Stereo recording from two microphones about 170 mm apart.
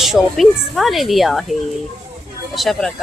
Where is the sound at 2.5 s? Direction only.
Centre (ahead or behind).